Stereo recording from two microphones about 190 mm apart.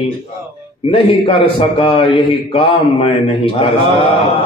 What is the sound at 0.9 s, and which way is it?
A man's voice, 30° left (ahead or behind).